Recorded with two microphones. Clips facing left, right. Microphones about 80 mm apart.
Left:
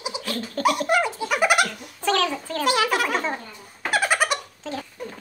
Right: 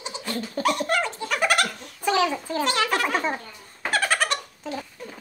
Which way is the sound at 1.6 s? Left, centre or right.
Centre.